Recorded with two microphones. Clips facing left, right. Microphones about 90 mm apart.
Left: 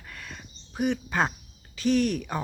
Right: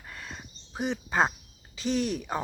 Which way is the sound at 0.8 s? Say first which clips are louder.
Left 1 dB; 25° right (ahead or behind).